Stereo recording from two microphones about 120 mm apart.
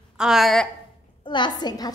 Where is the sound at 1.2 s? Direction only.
40° left (ahead or behind).